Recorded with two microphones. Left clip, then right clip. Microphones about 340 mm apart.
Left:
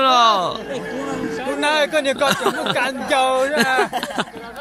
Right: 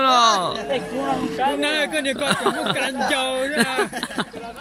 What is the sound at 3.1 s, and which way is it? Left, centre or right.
Speech, left.